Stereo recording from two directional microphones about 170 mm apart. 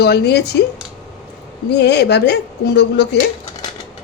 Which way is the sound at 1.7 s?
85° left.